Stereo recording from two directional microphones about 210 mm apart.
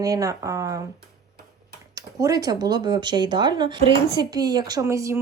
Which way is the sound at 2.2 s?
15° right (ahead or behind).